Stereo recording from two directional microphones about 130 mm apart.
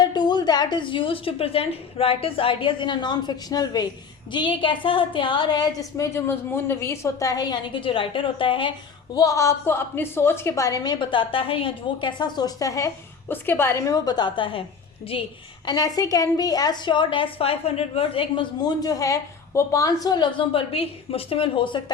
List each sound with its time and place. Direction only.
0.0 s a woman's voice: 35° left (ahead or behind)
6.1 s a woman's voice: 15° left (ahead or behind); by 8.7 s 40° left (ahead or behind)
9.1 s a woman's voice: 25° left (ahead or behind); by 15.3 s 45° left (ahead or behind)
15.6 s a woman's voice: 30° left (ahead or behind)